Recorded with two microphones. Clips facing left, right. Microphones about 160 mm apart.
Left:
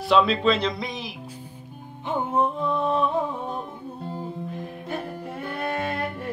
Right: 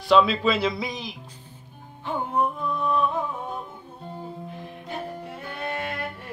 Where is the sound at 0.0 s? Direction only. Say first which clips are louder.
Even; centre (ahead or behind).